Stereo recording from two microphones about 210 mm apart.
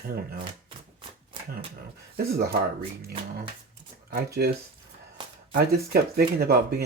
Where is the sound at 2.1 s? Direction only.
50° right (ahead or behind).